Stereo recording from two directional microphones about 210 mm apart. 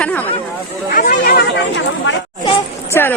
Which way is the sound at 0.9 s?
45° left (ahead or behind).